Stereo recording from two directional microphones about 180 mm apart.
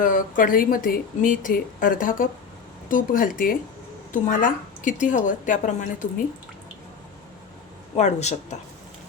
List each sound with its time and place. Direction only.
0.0 s speech: 50° left (ahead or behind)
7.9 s speech: 40° left (ahead or behind)